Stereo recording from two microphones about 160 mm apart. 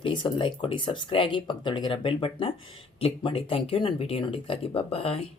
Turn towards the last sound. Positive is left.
turn(degrees=40)  # may be behind; listen again after turning